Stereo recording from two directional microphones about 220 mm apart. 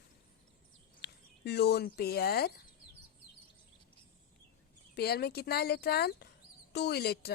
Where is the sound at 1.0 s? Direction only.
50° left (ahead or behind).